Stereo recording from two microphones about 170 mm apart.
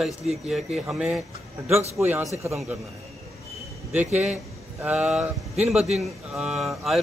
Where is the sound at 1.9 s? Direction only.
15° right (ahead or behind).